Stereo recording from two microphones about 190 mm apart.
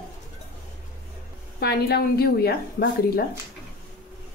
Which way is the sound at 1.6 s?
55° left (ahead or behind).